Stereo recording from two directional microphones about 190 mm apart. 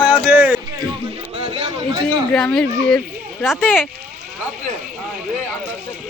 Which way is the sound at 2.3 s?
5° left (ahead or behind).